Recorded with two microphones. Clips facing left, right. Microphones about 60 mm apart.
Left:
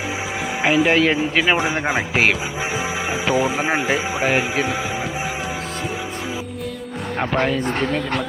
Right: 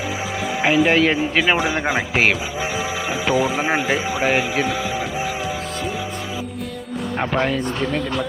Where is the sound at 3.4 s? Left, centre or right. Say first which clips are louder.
Even; centre.